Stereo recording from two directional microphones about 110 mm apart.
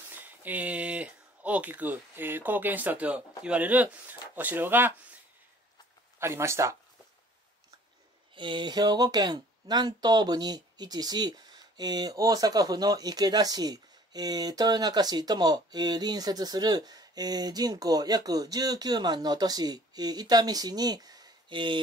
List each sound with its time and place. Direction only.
0.1 s speech: 15° right (ahead or behind)
6.1 s speech: 25° right (ahead or behind)
8.4 s speech: 45° right (ahead or behind)